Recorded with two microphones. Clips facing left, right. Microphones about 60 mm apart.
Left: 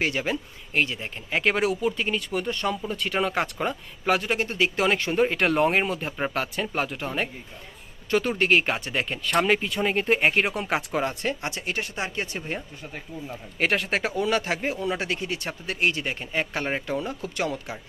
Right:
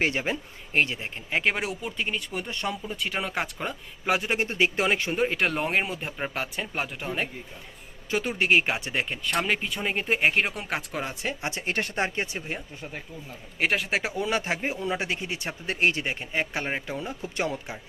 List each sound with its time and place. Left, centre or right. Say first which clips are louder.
0.0 s speech: even; right
1.3 s speech: left 3 dB; centre
4.0 s speech: left 2 dB; centre
4.9 s speech: left 3 dB; centre
5.2 s speech: left 8 dB; centre
11.4 s speech: even; right
11.7 s speech: right 4 dB; right
13.6 s speech: left 1 dB; centre
14.2 s speech: left 2 dB; right
16.3 s speech: left 2 dB; centre
17.3 s speech: even; right